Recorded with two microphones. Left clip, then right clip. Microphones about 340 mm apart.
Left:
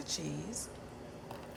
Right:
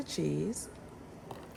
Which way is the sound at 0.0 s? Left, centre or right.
Centre.